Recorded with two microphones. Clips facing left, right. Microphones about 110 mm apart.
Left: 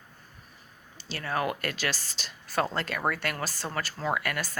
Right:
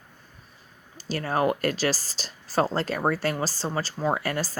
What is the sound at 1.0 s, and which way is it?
Speech, 40° right (ahead or behind).